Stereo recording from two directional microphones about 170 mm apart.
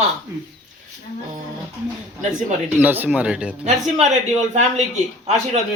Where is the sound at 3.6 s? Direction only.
45° right (ahead or behind).